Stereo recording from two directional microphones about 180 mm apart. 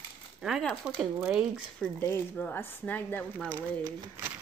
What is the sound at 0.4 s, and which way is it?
Speech, centre (ahead or behind).